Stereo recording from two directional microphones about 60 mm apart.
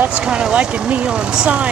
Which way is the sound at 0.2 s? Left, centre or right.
Centre.